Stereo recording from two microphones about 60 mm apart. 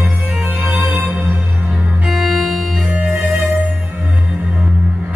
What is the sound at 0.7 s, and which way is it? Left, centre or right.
Music, right.